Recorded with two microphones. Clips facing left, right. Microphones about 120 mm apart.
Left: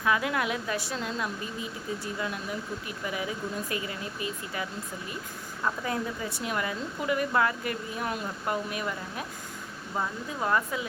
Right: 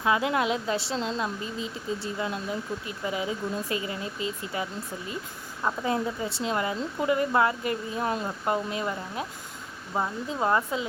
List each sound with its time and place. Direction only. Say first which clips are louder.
0.0 s a woman's voice: right 3 dB; 25° right (ahead or behind)
5.6 s a woman's voice: right 3 dB; 25° right (ahead or behind)